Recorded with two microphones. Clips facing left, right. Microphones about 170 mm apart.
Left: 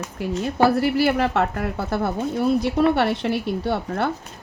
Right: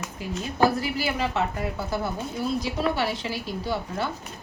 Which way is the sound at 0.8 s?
60° left (ahead or behind).